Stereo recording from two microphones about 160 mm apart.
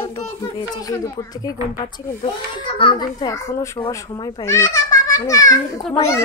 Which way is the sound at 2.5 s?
35° left (ahead or behind).